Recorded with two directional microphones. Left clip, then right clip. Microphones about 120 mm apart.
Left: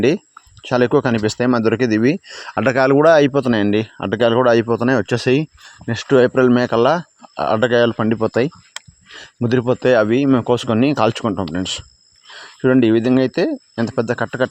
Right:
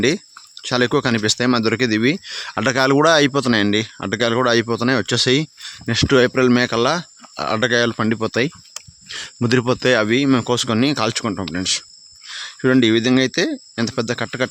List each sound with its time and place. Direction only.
0.0 s speech: 20° left (ahead or behind)
5.8 s speech: centre (ahead or behind)
8.2 s speech: 15° left (ahead or behind)
9.0 s speech: centre (ahead or behind)
10.5 s speech: 15° left (ahead or behind)
11.3 s speech: 15° left (ahead or behind)
12.3 s speech: 5° left (ahead or behind)